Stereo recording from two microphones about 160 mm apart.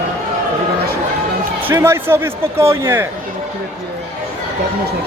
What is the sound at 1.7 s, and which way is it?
Speech, 15° right (ahead or behind).